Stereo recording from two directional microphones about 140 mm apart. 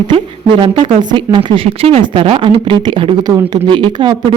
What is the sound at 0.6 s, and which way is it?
Speech, 40° right (ahead or behind).